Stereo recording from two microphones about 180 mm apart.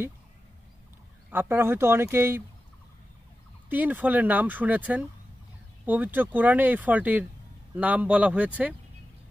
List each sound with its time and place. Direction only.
1.3 s speech: 10° right (ahead or behind)
3.7 s speech: 10° right (ahead or behind)